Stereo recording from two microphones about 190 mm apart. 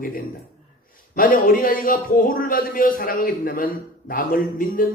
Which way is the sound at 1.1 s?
45° left (ahead or behind).